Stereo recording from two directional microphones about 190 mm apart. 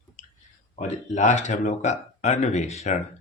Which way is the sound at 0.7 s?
40° left (ahead or behind).